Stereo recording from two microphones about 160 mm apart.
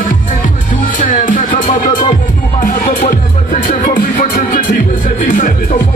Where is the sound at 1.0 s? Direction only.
55° left (ahead or behind).